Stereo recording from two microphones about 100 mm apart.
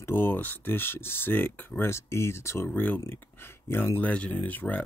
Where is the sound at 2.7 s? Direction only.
20° left (ahead or behind).